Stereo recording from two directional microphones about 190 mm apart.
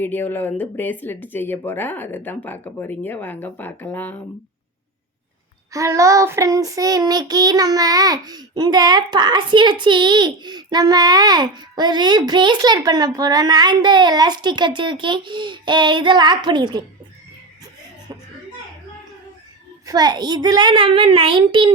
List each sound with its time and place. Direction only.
0.0 s speech: 10° left (ahead or behind)
5.7 s child singing: 15° right (ahead or behind)
19.8 s child singing: 20° right (ahead or behind)